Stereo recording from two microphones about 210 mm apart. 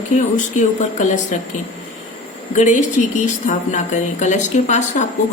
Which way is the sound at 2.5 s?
35° left (ahead or behind).